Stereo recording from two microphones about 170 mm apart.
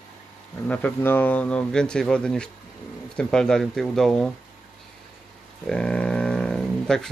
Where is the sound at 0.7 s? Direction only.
10° left (ahead or behind).